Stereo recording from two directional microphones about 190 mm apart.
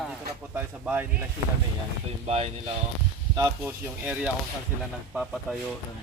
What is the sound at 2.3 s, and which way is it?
Speech, 35° right (ahead or behind).